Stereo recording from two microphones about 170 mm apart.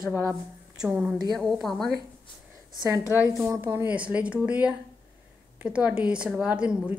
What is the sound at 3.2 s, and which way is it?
A woman's voice, 5° right (ahead or behind).